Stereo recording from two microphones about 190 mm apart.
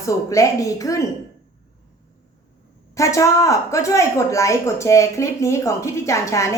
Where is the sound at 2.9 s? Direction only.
15° left (ahead or behind).